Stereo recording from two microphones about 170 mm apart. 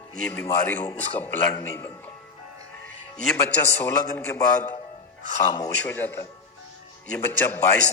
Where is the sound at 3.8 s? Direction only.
15° left (ahead or behind).